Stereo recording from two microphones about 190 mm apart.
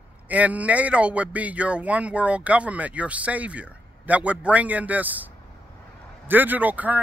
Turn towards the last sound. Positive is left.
turn(degrees=-10)  # may be behind; listen again after turning